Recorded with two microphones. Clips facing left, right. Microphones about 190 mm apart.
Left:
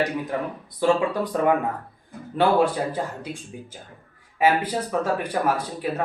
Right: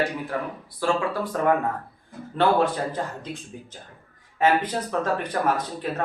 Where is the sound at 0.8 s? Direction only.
20° left (ahead or behind).